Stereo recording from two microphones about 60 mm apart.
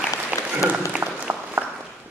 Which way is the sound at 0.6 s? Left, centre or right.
Centre.